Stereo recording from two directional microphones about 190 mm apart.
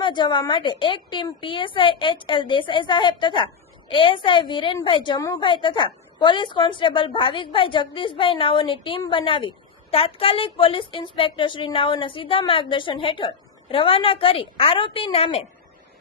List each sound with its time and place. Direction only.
0.0 s a woman's voice: 25° left (ahead or behind)